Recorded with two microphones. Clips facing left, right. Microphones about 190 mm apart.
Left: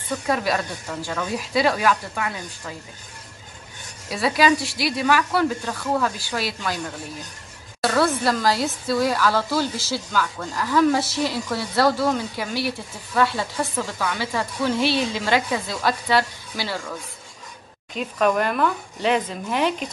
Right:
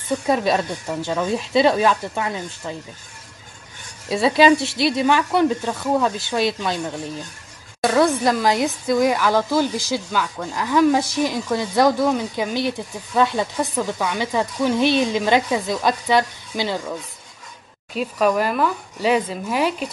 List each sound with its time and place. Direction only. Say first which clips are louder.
0.3 s speech: right 4 dB; 25° right (ahead or behind)
4.1 s speech: right 5 dB; 25° right (ahead or behind)
7.8 s a woman's voice: right 3 dB; 15° right (ahead or behind)
17.9 s speech: right 2 dB; 5° right (ahead or behind)